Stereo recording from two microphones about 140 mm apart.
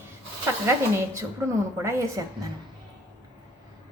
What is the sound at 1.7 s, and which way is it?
Speech, 20° right (ahead or behind).